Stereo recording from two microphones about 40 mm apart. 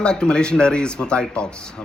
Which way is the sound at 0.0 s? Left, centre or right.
Left.